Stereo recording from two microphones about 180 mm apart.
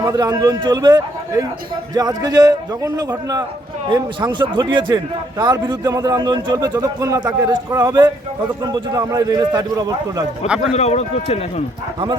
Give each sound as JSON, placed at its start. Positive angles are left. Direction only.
{"t": 0.0, "sound": "a man's voice", "side_deg": -20}
{"t": 10.7, "sound": "speech", "side_deg": 35}